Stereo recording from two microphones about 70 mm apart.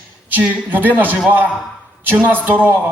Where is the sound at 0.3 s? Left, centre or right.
Right.